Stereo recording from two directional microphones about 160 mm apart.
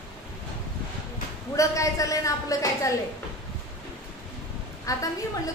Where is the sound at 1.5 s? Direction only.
20° left (ahead or behind).